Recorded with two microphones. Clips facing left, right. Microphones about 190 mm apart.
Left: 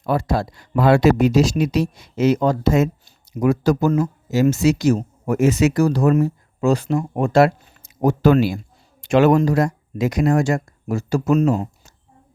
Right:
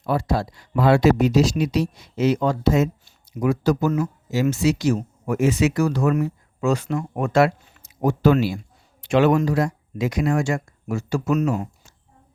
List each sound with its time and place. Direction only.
0.0 s speech: 50° left (ahead or behind); by 11.7 s 30° left (ahead or behind)